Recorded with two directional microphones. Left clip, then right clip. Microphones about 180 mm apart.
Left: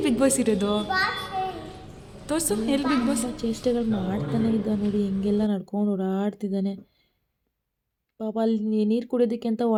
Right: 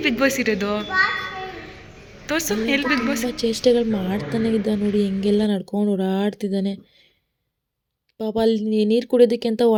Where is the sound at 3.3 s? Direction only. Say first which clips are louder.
Right 8 dB; 25° right (ahead or behind).